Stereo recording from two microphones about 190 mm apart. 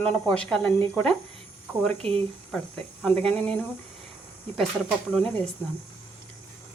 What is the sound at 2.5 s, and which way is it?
Speech, 5° left (ahead or behind).